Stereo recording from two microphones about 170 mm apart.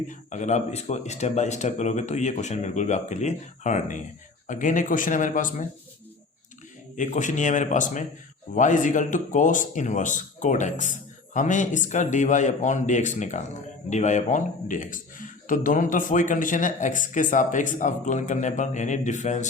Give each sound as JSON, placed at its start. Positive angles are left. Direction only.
{"t": 0.1, "sound": "speech", "side_deg": 45}
{"t": 6.9, "sound": "speech", "side_deg": 45}